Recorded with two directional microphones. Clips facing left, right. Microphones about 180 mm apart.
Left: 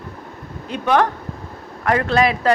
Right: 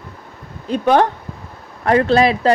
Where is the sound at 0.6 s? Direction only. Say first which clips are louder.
Right 3 dB; 35° right (ahead or behind).